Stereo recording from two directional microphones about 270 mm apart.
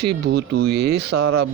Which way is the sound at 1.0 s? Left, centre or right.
Right.